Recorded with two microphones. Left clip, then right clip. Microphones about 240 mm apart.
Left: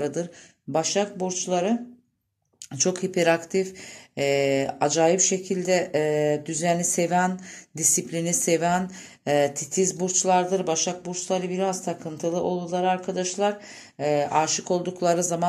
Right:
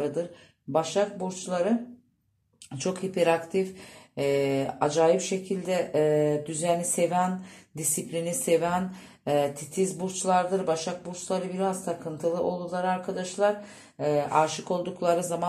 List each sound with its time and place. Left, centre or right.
0.0 s speech: left
2.7 s speech: left